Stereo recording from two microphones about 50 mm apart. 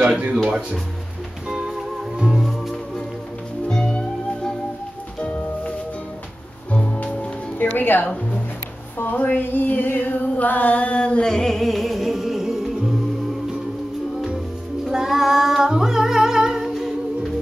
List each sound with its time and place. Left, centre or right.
2.1 s music: centre
3.7 s music: centre
5.2 s music: left
6.7 s music: left
7.5 s music: left
8.9 s female singing: left; by 12.9 s centre
14.9 s singing: centre